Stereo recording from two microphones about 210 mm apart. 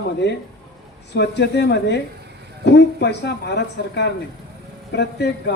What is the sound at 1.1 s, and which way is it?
A man's voice, 55° left (ahead or behind).